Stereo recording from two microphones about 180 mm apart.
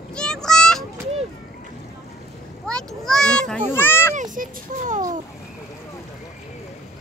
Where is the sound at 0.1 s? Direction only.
5° left (ahead or behind).